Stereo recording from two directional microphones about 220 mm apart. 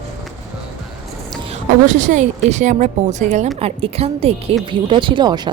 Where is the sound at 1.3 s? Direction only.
25° right (ahead or behind).